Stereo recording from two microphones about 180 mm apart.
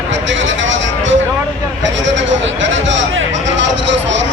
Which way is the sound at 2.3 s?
90° right.